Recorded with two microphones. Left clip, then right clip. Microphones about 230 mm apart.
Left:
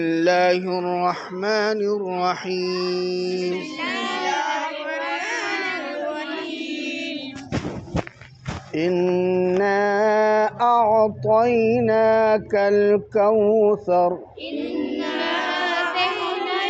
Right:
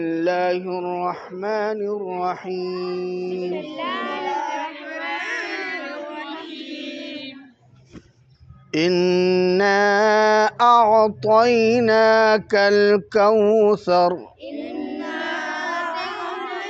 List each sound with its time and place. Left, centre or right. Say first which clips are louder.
0.0 s mantra: left 3 dB; centre
4.2 s music: left 2 dB; centre
8.7 s mantra: right 2 dB; right
14.8 s music: left 2 dB; centre